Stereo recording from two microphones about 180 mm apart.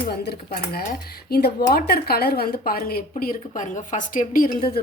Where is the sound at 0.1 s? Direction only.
65° left (ahead or behind).